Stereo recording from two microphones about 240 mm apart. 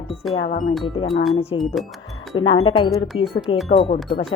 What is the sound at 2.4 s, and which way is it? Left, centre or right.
Speech, left.